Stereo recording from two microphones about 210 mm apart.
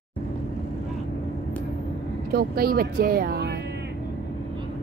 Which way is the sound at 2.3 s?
45° right (ahead or behind).